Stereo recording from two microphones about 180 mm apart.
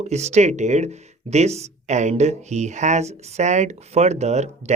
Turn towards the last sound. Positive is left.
turn(degrees=-40)  # may be behind; listen again after turning